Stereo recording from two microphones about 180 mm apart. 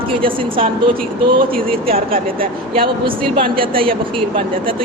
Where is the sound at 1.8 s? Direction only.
55° right (ahead or behind).